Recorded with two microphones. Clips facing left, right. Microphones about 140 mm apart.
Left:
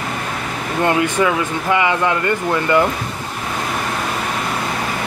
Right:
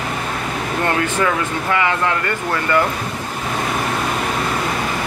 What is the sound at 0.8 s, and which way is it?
Speech, 15° left (ahead or behind).